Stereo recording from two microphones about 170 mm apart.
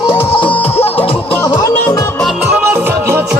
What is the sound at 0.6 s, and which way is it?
Music, 35° left (ahead or behind).